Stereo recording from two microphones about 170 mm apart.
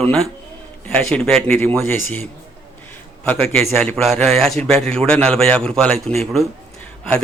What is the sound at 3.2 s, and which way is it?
A man's voice, 5° left (ahead or behind).